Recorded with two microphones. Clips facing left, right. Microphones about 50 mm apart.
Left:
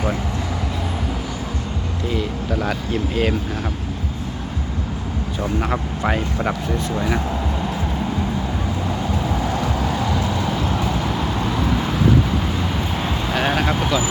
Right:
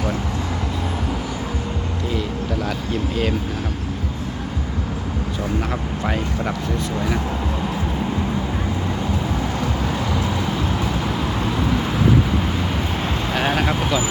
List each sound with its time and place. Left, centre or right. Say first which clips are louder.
5.7 s speech: left 2 dB; left
10.0 s vehicle: left 1 dB; centre
13.3 s speech: left 1 dB; centre